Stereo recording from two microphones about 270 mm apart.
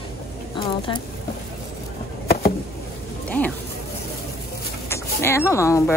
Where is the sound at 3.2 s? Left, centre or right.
Centre.